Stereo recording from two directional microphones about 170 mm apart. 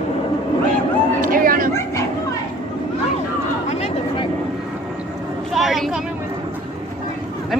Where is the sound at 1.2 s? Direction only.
55° right (ahead or behind).